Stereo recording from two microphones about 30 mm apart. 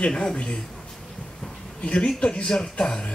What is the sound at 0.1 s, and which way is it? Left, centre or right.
Speech, left.